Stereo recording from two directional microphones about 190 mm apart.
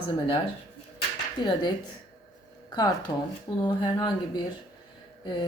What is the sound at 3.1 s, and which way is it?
Speech, 15° left (ahead or behind).